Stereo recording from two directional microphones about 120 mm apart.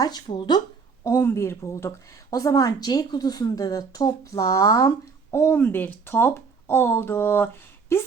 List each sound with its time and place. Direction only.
0.0 s speech: 35° left (ahead or behind)
1.0 s a woman's voice: 25° left (ahead or behind)